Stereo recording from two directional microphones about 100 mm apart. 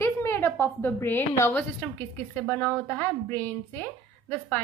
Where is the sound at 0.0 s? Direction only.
25° left (ahead or behind).